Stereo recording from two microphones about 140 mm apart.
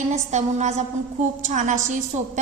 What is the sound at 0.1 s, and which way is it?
A woman's voice, 60° right (ahead or behind).